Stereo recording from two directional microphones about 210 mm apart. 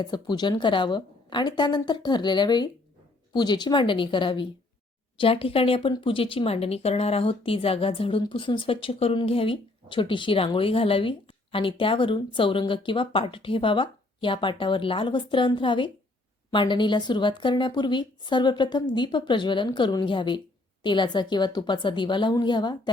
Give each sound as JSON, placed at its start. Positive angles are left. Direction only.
{"t": 0.0, "sound": "speech", "side_deg": 20}